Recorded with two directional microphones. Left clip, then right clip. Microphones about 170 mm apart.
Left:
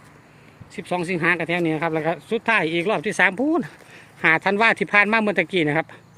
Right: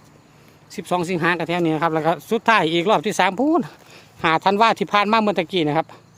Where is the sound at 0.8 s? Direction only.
25° right (ahead or behind).